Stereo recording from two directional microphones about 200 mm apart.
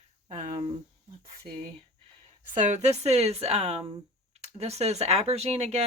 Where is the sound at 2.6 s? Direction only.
35° right (ahead or behind).